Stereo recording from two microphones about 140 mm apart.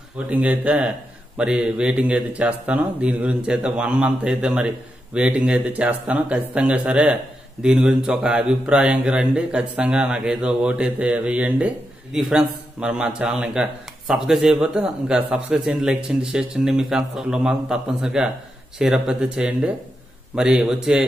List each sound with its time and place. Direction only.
0.3 s speech: 10° right (ahead or behind)